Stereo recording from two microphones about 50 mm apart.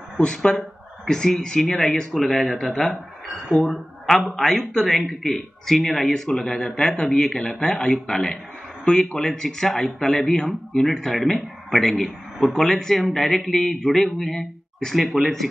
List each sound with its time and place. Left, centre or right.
0.2 s speech: centre
4.0 s speech: centre